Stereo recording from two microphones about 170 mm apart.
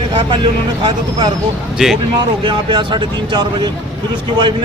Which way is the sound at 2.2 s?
30° right (ahead or behind).